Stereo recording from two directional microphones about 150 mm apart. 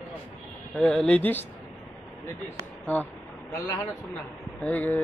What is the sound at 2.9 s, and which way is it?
Mantra, 10° left (ahead or behind).